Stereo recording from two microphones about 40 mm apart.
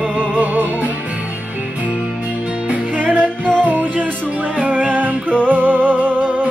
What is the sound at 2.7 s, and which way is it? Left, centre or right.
Music, right.